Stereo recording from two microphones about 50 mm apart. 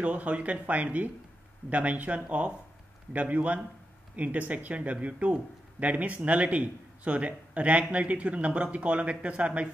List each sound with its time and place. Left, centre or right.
0.0 s speech: right